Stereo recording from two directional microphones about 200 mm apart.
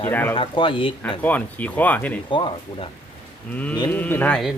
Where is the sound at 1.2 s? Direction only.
10° left (ahead or behind).